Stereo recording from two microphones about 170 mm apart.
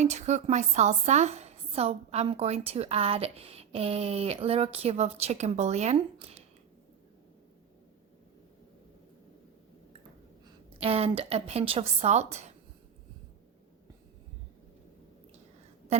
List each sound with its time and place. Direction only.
0.0 s a woman's voice: 40° right (ahead or behind)
10.8 s a woman's voice: 35° right (ahead or behind)